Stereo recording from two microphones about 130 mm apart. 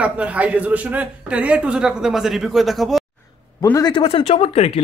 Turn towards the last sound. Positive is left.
turn(degrees=50)  # may be behind; listen again after turning